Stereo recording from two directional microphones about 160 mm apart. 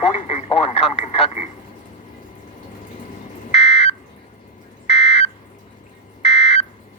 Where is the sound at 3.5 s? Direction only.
40° left (ahead or behind).